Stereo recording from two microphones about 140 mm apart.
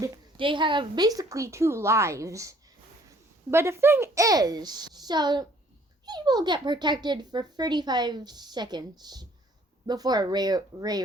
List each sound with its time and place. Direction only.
0.3 s speech: 35° right (ahead or behind)